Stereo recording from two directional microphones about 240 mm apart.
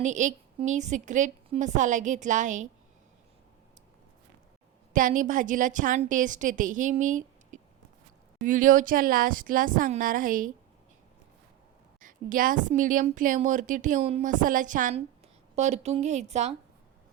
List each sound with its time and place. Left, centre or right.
0.0 s a woman's voice: right
4.9 s a woman's voice: right
11.9 s a woman's voice: right